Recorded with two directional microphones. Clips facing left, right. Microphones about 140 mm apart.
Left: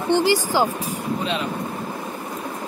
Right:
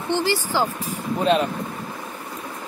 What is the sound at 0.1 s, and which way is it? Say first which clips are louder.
Speech: left 4 dB; 15° left (ahead or behind).